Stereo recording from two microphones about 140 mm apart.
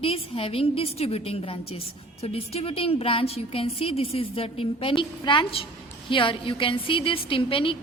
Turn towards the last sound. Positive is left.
turn(degrees=40)  # may be behind; listen again after turning